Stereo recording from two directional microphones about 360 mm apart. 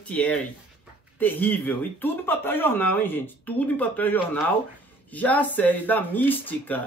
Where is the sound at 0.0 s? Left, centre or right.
Centre.